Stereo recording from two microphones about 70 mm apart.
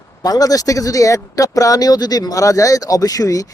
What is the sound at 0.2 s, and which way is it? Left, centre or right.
Speech, left.